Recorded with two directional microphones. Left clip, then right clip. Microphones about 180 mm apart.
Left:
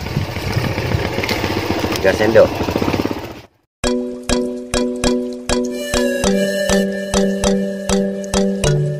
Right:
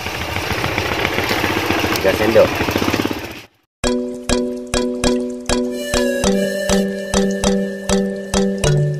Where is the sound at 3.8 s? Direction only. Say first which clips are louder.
Even; centre (ahead or behind).